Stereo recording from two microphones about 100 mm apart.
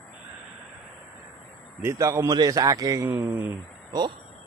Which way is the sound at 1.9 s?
30° right (ahead or behind).